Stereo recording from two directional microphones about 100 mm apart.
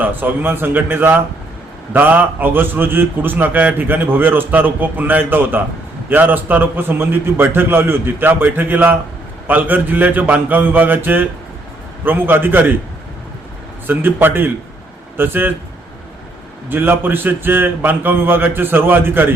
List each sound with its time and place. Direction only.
0.0 s a man's voice: 20° right (ahead or behind)
13.8 s a man's voice: 20° right (ahead or behind)
16.6 s a man's voice: 20° right (ahead or behind)